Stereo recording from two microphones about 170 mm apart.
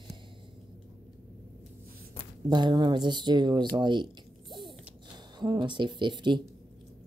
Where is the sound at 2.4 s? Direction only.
25° right (ahead or behind).